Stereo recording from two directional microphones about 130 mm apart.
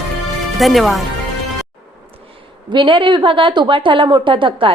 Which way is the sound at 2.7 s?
40° right (ahead or behind).